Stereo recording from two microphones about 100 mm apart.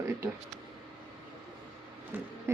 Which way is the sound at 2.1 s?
20° right (ahead or behind).